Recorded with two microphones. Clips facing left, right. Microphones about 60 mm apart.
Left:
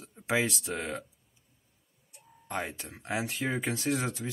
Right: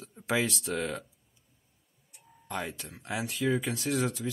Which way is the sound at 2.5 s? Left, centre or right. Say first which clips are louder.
Left 1 dB; left.